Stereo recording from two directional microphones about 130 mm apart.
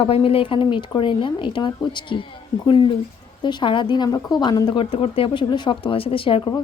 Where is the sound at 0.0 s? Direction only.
45° left (ahead or behind).